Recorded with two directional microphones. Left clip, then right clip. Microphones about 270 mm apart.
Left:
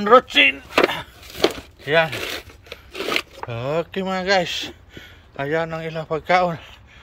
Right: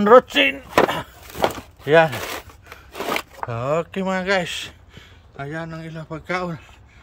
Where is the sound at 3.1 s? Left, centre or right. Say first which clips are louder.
Left 1 dB; centre.